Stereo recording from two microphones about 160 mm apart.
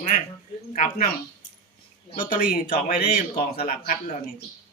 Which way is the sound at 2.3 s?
60° left (ahead or behind).